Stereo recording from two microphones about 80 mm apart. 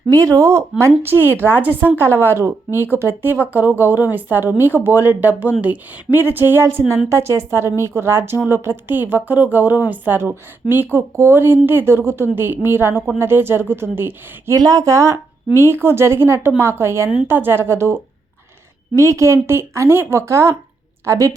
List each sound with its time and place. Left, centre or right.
0.1 s a woman's voice: right
14.5 s a woman's voice: right